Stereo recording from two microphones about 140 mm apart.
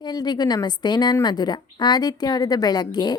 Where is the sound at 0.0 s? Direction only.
30° left (ahead or behind).